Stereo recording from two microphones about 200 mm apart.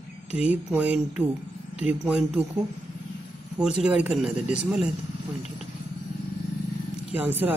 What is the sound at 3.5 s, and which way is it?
Speech, 5° right (ahead or behind).